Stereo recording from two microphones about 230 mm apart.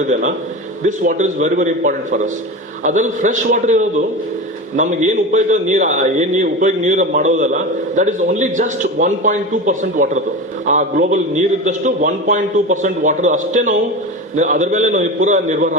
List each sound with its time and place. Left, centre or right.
0.1 s a man's voice: right